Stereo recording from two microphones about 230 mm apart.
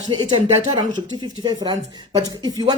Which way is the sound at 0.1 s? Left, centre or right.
Centre.